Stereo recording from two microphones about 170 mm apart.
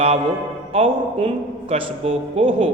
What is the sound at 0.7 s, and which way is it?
A man's voice, 35° right (ahead or behind).